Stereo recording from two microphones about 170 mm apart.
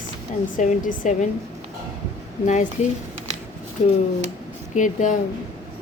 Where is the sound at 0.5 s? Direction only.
50° left (ahead or behind).